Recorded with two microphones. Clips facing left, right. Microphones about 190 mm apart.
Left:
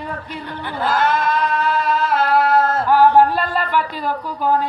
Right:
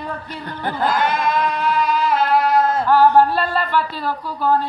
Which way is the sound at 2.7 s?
10° left (ahead or behind).